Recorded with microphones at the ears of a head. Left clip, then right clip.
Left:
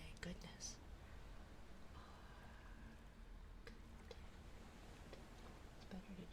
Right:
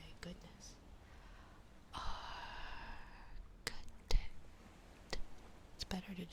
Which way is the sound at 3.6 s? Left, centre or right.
Right.